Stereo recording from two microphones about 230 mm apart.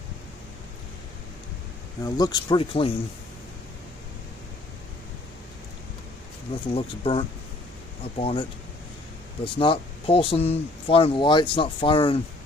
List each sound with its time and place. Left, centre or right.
2.0 s speech: centre
6.7 s speech: left